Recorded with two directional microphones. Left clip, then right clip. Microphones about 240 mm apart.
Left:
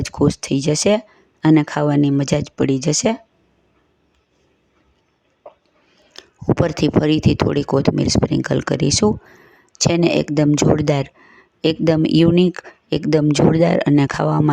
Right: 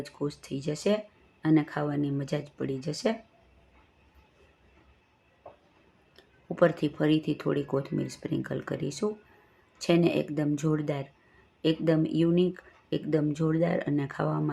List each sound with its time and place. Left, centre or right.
0.0 s speech: left
6.1 s speech: left